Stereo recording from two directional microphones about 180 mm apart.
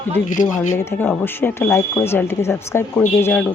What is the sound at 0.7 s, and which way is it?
Speech, 10° left (ahead or behind).